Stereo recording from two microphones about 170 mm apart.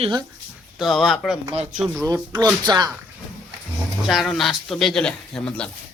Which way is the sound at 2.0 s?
20° right (ahead or behind).